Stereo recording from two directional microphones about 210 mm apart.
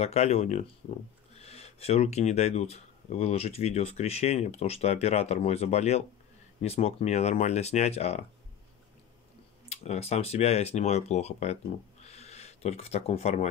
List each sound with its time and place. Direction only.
0.0 s speech: 30° left (ahead or behind)
9.7 s speech: 30° left (ahead or behind)
12.0 s a sound: 30° left (ahead or behind)